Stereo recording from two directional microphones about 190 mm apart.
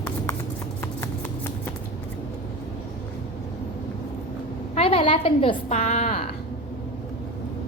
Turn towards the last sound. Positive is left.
turn(degrees=40)  # may be behind; listen again after turning